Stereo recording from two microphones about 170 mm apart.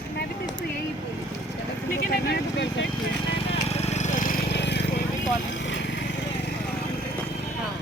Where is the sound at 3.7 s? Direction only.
40° left (ahead or behind).